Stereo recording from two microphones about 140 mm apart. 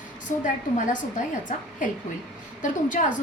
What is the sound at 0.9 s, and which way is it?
Speech, 65° left (ahead or behind).